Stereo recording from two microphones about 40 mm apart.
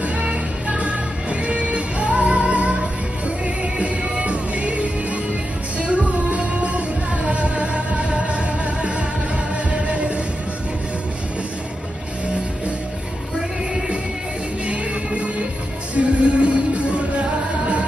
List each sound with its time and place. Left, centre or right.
0.0 s music: right
15.9 s music: right